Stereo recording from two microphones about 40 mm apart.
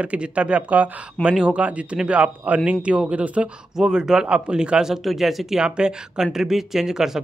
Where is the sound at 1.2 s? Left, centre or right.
Left.